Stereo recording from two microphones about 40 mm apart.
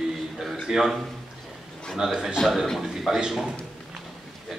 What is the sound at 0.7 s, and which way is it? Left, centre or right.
Speech, centre.